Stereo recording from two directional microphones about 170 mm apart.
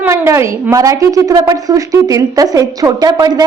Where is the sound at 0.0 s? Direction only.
15° right (ahead or behind).